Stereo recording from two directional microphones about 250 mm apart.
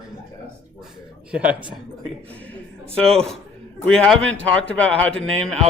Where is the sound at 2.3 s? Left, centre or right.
Centre.